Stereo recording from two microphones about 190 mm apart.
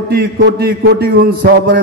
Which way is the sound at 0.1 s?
65° right (ahead or behind).